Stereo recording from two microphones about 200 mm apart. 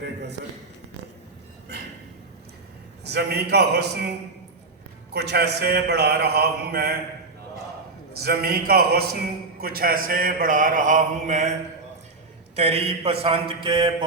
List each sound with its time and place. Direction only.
0.0 s a man's voice: 55° right (ahead or behind)
3.0 s a man's voice: 55° right (ahead or behind)
5.1 s a man's voice: 55° right (ahead or behind)
8.1 s a man's voice: 50° right (ahead or behind)
12.5 s mantra: 30° right (ahead or behind)